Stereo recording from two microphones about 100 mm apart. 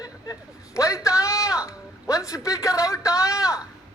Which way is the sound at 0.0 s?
35° left (ahead or behind).